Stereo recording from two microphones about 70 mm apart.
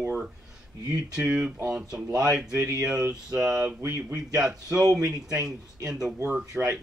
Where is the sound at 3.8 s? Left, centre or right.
Right.